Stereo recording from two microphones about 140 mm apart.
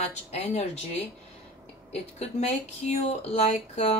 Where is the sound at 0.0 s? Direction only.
50° left (ahead or behind).